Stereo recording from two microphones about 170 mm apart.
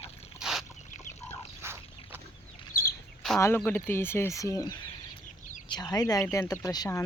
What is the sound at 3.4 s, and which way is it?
Speech, 10° left (ahead or behind).